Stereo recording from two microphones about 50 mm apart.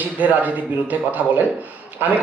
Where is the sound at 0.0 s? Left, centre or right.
Right.